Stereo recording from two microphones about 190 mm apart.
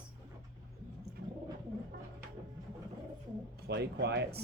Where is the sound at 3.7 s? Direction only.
60° right (ahead or behind).